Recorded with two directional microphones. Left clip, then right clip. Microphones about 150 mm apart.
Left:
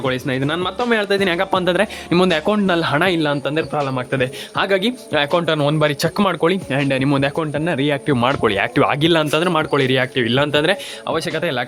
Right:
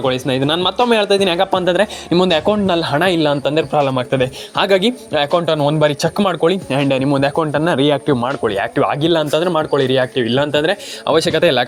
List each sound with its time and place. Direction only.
0.0 s a man's voice: 5° right (ahead or behind)
5.1 s speech: centre (ahead or behind)
8.1 s a man's voice: 25° left (ahead or behind); by 10.8 s 5° left (ahead or behind)
11.0 s speech: 25° right (ahead or behind)